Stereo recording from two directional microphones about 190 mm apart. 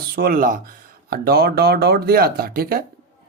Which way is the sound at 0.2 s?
50° right (ahead or behind).